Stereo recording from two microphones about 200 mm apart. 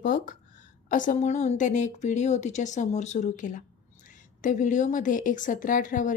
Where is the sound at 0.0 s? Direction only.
45° left (ahead or behind).